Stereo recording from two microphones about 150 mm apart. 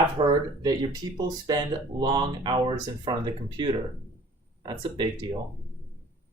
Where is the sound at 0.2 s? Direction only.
35° right (ahead or behind).